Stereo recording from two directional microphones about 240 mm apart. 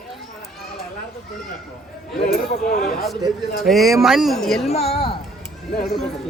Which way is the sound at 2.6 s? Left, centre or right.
Left.